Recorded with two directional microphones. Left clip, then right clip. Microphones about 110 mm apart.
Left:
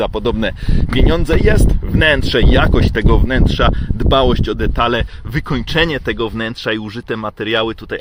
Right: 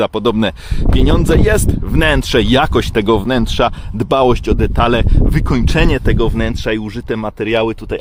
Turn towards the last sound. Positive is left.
turn(degrees=-25)  # may be behind; listen again after turning